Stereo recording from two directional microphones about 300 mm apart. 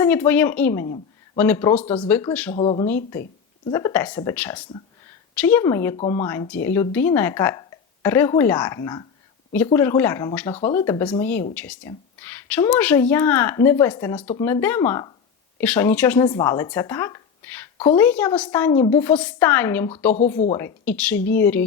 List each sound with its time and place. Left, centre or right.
0.0 s speech: centre
2.6 s speech: centre
2.8 s speech: centre
16.7 s a sound: centre
17.9 s speech: centre